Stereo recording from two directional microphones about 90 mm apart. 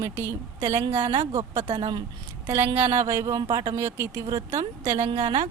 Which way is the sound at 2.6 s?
90° right.